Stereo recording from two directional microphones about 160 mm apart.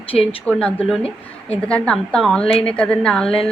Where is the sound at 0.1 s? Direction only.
35° left (ahead or behind).